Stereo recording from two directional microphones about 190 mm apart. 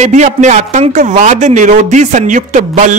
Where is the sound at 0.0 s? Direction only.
40° right (ahead or behind).